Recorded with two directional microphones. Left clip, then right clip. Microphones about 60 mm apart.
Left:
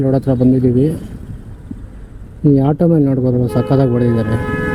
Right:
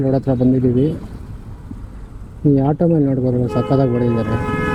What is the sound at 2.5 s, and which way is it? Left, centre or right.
Speech, left.